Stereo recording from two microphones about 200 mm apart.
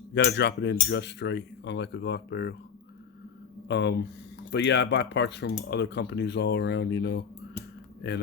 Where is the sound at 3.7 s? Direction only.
60° left (ahead or behind).